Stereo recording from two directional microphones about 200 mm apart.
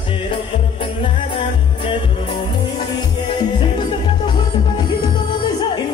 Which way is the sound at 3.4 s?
20° left (ahead or behind).